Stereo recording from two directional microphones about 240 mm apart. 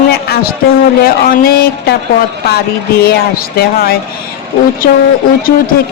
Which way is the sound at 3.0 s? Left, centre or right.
Left.